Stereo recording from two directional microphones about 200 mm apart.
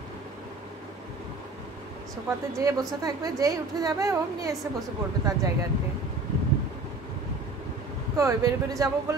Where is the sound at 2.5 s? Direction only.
15° right (ahead or behind).